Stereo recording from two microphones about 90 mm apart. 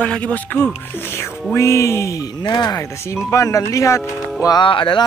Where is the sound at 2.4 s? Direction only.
50° left (ahead or behind).